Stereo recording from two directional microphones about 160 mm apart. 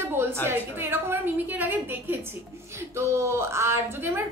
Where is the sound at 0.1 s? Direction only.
15° right (ahead or behind).